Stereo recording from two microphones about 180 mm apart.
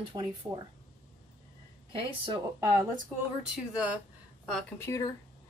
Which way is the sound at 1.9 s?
30° right (ahead or behind).